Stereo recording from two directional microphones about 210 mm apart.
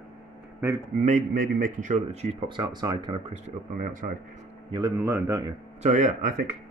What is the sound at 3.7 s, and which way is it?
Speech, 40° right (ahead or behind).